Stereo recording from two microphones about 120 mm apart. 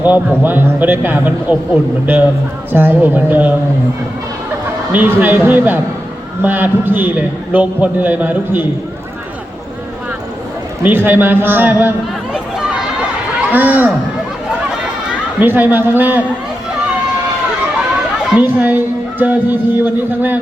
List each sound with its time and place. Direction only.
0.0 s a man's voice: 15° right (ahead or behind)
2.7 s a man's voice: 15° right (ahead or behind)
4.9 s a man's voice: 15° right (ahead or behind)
10.8 s a man's voice: 20° right (ahead or behind)
13.5 s a man's voice: 15° right (ahead or behind)
15.4 s a man's voice: 15° right (ahead or behind)
18.3 s a man's voice: 15° right (ahead or behind)